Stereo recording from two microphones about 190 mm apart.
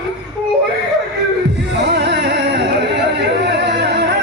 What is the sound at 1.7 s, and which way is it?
Music, 65° right (ahead or behind).